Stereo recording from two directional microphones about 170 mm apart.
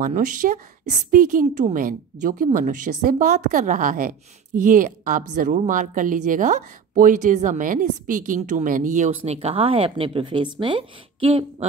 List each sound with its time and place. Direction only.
0.0 s speech: 50° right (ahead or behind); by 11.4 s 30° right (ahead or behind)